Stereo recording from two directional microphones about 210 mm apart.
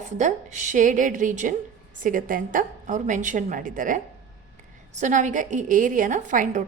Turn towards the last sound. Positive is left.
turn(degrees=-35)  # may be behind; listen again after turning